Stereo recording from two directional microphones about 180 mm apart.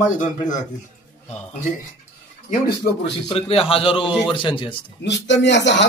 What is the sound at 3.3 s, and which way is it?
A man's voice, 30° left (ahead or behind).